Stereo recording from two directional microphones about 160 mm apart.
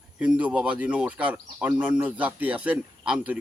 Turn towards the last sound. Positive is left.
turn(degrees=-10)  # may be behind; listen again after turning